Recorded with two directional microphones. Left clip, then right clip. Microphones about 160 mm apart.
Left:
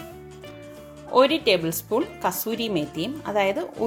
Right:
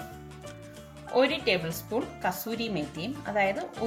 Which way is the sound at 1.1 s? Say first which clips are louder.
Left 6 dB; 55° left (ahead or behind).